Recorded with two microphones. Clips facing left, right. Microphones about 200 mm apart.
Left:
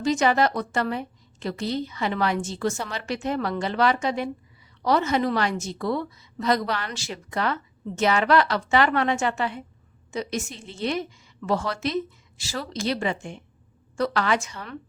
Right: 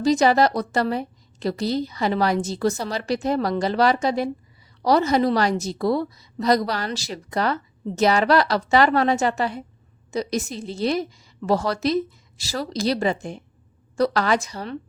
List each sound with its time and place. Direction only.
0.0 s a woman's voice: 35° right (ahead or behind)